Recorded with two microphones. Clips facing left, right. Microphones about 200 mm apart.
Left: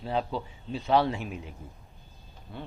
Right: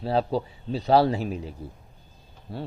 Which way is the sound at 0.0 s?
35° right (ahead or behind).